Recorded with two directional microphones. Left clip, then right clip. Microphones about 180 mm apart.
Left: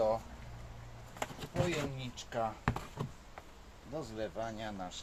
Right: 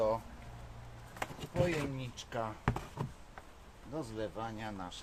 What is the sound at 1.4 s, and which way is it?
Speech, 5° right (ahead or behind).